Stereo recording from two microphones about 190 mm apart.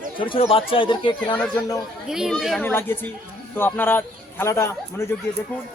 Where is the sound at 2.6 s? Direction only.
10° left (ahead or behind).